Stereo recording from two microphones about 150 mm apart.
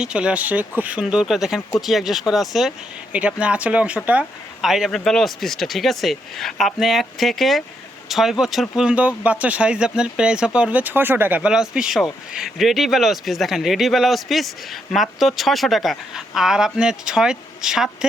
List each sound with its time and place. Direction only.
0.0 s speech: 5° right (ahead or behind)